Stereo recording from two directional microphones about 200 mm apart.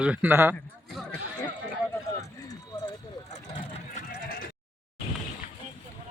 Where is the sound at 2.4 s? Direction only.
20° left (ahead or behind).